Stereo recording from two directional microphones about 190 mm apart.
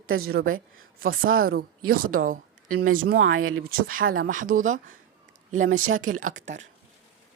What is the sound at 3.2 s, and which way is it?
Speech, 90° right.